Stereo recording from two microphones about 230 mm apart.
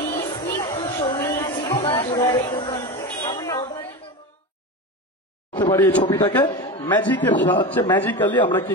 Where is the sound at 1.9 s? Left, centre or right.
Centre.